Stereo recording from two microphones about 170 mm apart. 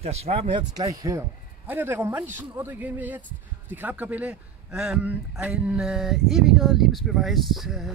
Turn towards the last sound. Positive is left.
turn(degrees=0)  # may be behind; listen again after turning